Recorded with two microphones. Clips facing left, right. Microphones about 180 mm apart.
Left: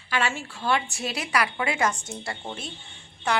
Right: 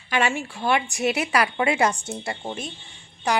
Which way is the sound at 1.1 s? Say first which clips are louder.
Left 1 dB; 25° right (ahead or behind).